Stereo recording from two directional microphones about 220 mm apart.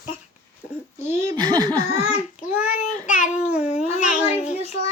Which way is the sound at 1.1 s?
15° right (ahead or behind).